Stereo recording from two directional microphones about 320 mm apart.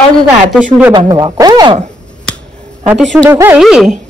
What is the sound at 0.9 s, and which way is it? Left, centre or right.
Speech, centre.